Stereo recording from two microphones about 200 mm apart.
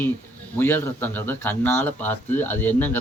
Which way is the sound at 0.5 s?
10° left (ahead or behind).